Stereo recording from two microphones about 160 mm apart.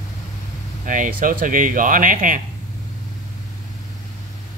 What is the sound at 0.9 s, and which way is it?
Speech, 55° right (ahead or behind).